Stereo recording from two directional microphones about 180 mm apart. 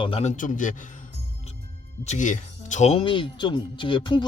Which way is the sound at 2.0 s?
45° left (ahead or behind).